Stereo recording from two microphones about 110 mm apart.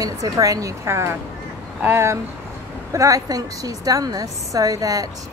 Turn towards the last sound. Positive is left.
turn(degrees=-35)  # may be behind; listen again after turning